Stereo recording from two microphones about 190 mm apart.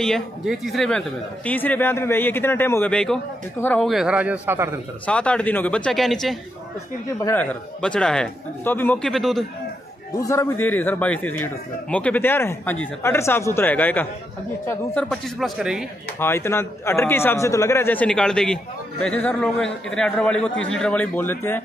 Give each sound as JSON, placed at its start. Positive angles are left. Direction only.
{"t": 0.0, "sound": "speech", "side_deg": 0}
{"t": 5.0, "sound": "a man's voice", "side_deg": 5}
{"t": 7.2, "sound": "speech", "side_deg": 15}
{"t": 7.8, "sound": "a man's voice", "side_deg": 5}
{"t": 10.1, "sound": "speech", "side_deg": 15}
{"t": 15.0, "sound": "a man's voice", "side_deg": 0}
{"t": 16.2, "sound": "speech", "side_deg": 15}